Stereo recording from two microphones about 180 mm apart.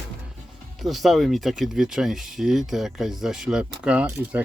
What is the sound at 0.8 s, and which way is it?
Speech, centre (ahead or behind).